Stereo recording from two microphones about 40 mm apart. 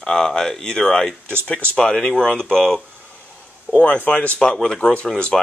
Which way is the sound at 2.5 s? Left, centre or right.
Centre.